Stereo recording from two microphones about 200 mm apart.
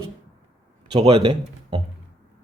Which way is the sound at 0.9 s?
30° right (ahead or behind).